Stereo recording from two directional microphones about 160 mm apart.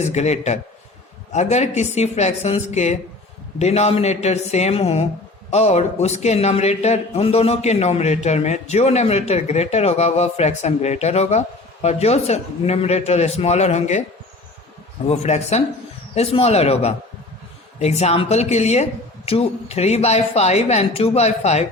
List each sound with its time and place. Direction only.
0.0 s a man's voice: 45° left (ahead or behind)
15.0 s a man's voice: 45° left (ahead or behind)